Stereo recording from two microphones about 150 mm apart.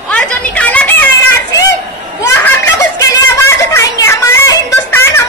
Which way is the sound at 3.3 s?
20° left (ahead or behind).